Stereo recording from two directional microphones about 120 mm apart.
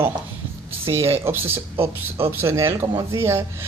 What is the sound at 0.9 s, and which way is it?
Speech, 20° right (ahead or behind).